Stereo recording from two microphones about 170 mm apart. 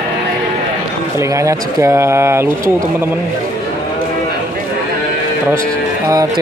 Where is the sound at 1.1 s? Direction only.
20° right (ahead or behind).